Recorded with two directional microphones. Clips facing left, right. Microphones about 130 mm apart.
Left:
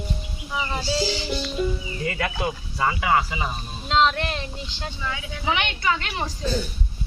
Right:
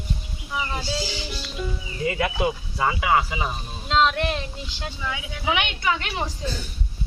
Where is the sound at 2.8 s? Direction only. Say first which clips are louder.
Even; 10° right (ahead or behind).